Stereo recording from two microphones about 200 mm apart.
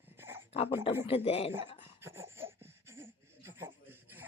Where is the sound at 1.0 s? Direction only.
30° left (ahead or behind).